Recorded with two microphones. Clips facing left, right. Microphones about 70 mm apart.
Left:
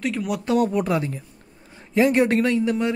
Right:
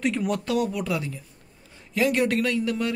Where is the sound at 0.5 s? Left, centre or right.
Left.